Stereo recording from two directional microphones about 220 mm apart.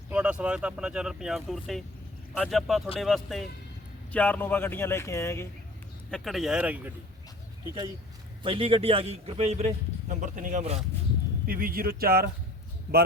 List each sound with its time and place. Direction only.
0.1 s speech: 5° right (ahead or behind); by 5.5 s 10° left (ahead or behind)
6.1 s speech: centre (ahead or behind)
8.4 s a man's voice: 25° right (ahead or behind); by 12.3 s 45° right (ahead or behind)